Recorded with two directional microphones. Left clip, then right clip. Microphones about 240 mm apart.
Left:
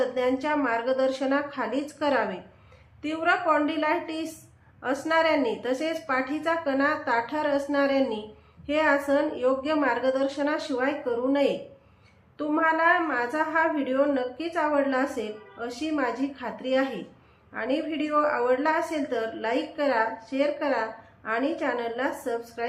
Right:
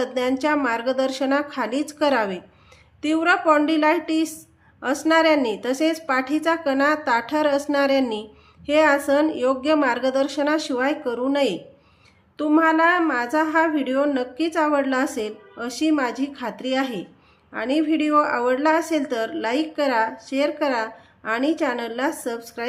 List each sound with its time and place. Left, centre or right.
0.0 s a woman's voice: right